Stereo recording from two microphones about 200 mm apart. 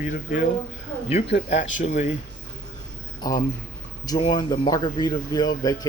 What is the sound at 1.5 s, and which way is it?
Speech, 35° left (ahead or behind).